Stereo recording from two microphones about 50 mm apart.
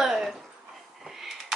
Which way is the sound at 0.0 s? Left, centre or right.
Centre.